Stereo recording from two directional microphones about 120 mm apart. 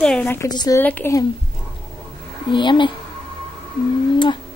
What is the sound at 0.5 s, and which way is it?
Speech, 35° left (ahead or behind).